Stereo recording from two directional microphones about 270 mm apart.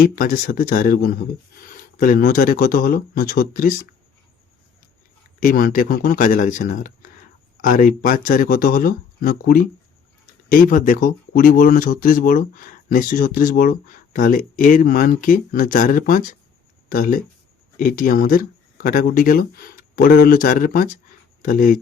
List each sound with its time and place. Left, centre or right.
0.0 s speech: left
5.4 s speech: left